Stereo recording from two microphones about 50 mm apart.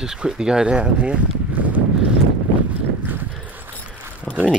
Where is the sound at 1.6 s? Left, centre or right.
Right.